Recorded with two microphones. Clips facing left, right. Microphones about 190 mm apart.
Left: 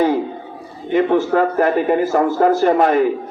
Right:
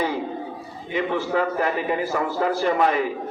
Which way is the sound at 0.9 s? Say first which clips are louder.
Left 8 dB; 50° left (ahead or behind).